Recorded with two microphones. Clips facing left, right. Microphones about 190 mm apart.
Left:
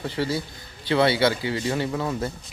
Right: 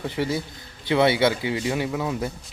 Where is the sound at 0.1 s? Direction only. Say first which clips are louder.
Left 1 dB; 20° right (ahead or behind).